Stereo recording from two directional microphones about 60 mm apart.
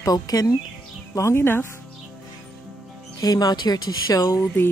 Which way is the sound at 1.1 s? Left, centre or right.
Left.